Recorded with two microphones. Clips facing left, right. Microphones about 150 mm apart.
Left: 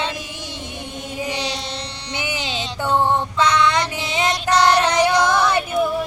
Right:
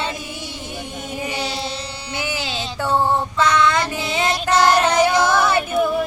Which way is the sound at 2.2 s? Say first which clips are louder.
Right 1 dB; 20° left (ahead or behind).